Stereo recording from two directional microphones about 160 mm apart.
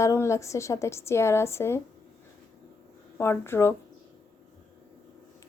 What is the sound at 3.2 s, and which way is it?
Speech, 15° left (ahead or behind).